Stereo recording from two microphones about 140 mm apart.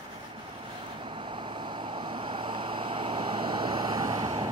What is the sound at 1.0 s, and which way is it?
Vehicle, 35° right (ahead or behind).